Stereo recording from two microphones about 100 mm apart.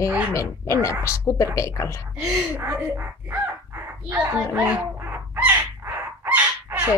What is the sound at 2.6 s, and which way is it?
Speech, 20° right (ahead or behind).